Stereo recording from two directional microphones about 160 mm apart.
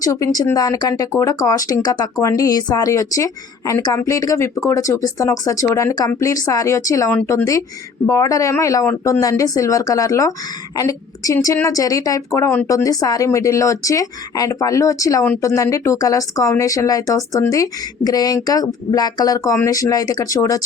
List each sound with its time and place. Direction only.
0.0 s a woman's voice: 20° left (ahead or behind)